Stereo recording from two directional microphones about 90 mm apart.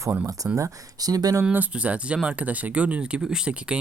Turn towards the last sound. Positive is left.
turn(degrees=-10)  # may be behind; listen again after turning